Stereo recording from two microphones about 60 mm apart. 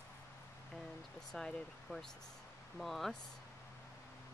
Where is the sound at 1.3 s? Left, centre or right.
Centre.